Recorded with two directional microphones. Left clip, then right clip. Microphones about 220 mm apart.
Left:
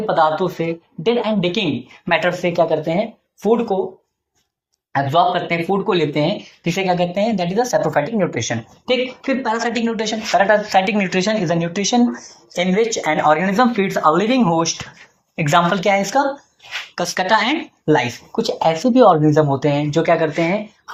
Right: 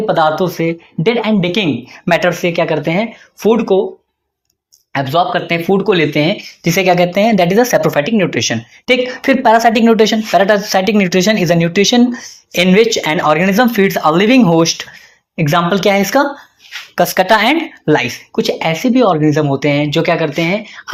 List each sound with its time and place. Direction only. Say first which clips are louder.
0.0 s speech: right 4 dB; 45° right (ahead or behind)
4.9 s speech: right 2 dB; 40° right (ahead or behind)